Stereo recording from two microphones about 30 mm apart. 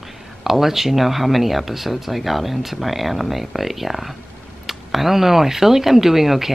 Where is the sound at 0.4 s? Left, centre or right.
Centre.